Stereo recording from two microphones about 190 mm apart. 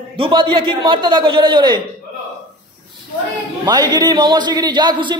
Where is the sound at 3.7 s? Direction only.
20° right (ahead or behind).